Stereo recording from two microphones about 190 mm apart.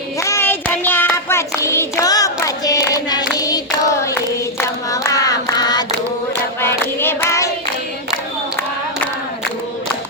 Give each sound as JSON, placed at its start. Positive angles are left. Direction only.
{"t": 0.2, "sound": "child singing", "side_deg": 15}